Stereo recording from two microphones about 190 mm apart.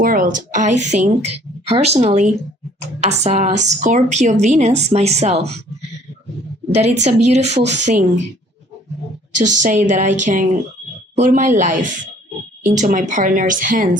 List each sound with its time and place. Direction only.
0.0 s a woman's voice: 50° right (ahead or behind)
7.0 s a woman's voice: 35° right (ahead or behind)
9.4 s a woman's voice: 40° right (ahead or behind)